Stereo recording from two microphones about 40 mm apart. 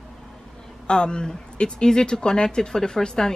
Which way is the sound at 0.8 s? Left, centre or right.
Left.